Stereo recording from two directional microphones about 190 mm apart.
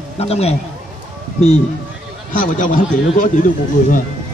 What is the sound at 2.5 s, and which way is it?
Speech, 40° left (ahead or behind).